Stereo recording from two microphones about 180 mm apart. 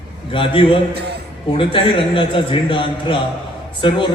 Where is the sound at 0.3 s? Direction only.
30° left (ahead or behind).